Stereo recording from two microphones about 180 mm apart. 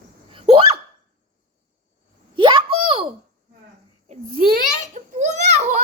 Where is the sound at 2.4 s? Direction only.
25° right (ahead or behind).